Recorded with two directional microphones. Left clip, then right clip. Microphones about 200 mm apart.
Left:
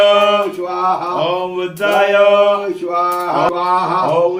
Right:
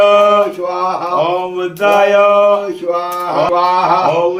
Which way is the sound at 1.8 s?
15° right (ahead or behind).